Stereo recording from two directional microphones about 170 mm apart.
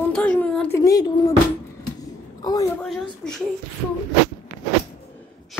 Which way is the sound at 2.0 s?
20° left (ahead or behind).